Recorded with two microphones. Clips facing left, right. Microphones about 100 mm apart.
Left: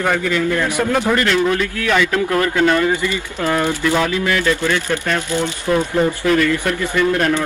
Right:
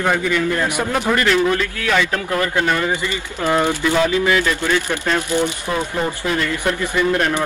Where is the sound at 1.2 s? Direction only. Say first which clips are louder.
Even; centre (ahead or behind).